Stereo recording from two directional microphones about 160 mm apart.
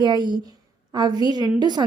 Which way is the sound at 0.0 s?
30° right (ahead or behind).